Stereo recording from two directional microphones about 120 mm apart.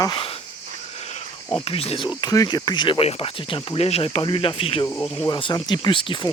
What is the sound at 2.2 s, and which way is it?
Speech, 30° left (ahead or behind).